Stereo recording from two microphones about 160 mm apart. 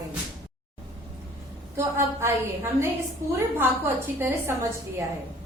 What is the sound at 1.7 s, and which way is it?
A woman's voice, 15° right (ahead or behind).